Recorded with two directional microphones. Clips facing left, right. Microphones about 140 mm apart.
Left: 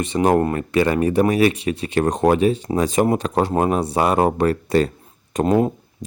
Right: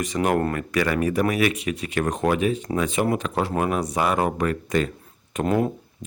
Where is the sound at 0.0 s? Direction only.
30° left (ahead or behind).